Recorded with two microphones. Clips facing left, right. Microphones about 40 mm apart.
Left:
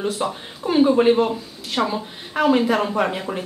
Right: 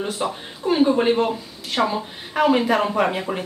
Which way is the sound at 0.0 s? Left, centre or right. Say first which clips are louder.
Left 1 dB; centre.